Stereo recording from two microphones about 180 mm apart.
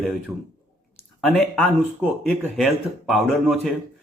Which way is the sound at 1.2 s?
5° left (ahead or behind).